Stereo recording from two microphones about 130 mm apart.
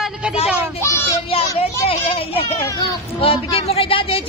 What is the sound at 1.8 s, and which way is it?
A child's voice, 45° left (ahead or behind).